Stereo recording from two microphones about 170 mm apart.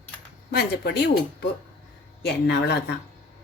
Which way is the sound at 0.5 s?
70° left (ahead or behind).